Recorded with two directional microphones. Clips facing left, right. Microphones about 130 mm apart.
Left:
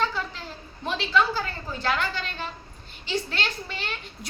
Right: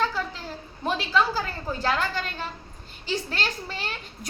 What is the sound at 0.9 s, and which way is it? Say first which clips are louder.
A woman's voice: even; 40° right (ahead or behind).